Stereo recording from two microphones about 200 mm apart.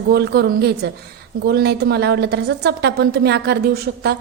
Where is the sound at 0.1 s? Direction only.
55° right (ahead or behind).